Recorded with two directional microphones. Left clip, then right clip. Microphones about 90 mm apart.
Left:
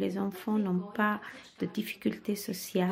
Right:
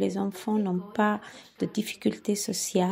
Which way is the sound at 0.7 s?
35° right (ahead or behind).